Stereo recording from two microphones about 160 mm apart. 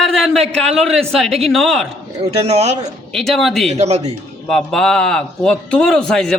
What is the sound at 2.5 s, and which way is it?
Speech, 40° right (ahead or behind).